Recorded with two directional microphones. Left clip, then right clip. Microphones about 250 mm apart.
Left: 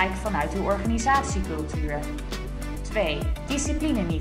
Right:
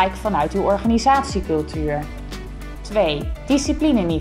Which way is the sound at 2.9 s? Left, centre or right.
Centre.